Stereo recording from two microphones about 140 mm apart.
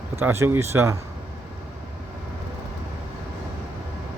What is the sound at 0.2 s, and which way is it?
Speech, 15° right (ahead or behind).